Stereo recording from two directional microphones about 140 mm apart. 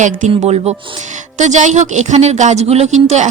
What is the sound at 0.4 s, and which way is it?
Speech, 50° right (ahead or behind).